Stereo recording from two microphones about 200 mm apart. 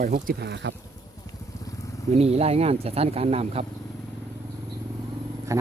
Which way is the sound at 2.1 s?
30° right (ahead or behind).